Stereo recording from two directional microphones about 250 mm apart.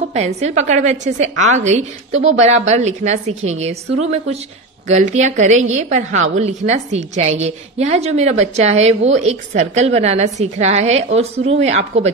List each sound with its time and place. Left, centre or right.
0.1 s a woman's voice: right